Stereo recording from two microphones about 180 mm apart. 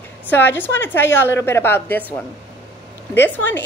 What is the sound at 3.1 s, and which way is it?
Speech, 10° left (ahead or behind).